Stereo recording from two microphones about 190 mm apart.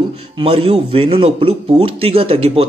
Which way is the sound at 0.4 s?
30° right (ahead or behind).